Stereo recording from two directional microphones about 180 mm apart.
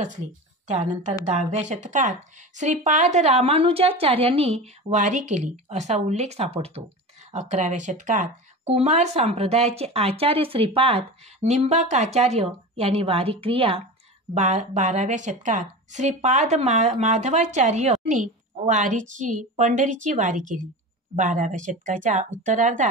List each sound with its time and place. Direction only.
0.7 s speech: 40° right (ahead or behind)